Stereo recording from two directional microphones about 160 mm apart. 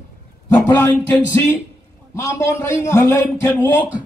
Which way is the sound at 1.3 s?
15° left (ahead or behind).